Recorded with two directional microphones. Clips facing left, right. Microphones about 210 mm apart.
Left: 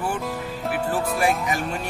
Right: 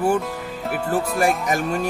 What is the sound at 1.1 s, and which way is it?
Speech, 45° right (ahead or behind).